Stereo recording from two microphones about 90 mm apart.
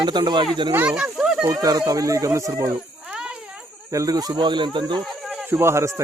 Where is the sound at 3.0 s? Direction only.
10° right (ahead or behind).